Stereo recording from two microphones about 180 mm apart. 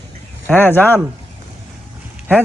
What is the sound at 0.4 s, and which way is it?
Speech, 10° left (ahead or behind).